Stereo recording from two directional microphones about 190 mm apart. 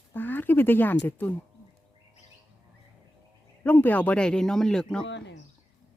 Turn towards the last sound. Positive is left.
turn(degrees=70)  # may be behind; listen again after turning